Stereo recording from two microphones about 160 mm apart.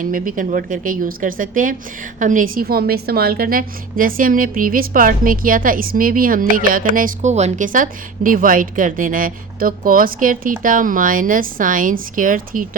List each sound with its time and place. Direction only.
0.0 s a woman's voice: 55° right (ahead or behind)